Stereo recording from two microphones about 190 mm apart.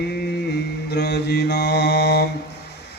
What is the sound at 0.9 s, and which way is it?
Mantra, 60° left (ahead or behind).